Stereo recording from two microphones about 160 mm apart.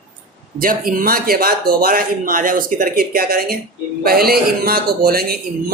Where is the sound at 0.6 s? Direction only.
60° right (ahead or behind).